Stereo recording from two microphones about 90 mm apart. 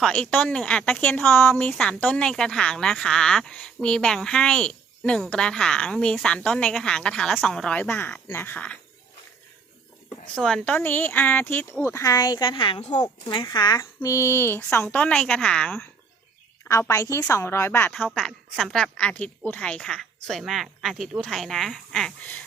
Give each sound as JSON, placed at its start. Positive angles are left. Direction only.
{"t": 0.0, "sound": "speech", "side_deg": 10}
{"t": 1.3, "sound": "a woman's voice", "side_deg": 25}
{"t": 7.8, "sound": "a woman's voice", "side_deg": 20}
{"t": 10.3, "sound": "speech", "side_deg": 10}
{"t": 10.8, "sound": "speech", "side_deg": 25}
{"t": 14.9, "sound": "speech", "side_deg": 15}
{"t": 16.6, "sound": "a woman's voice", "side_deg": 35}
{"t": 18.1, "sound": "a woman's voice", "side_deg": 10}
{"t": 18.8, "sound": "a woman's voice", "side_deg": 15}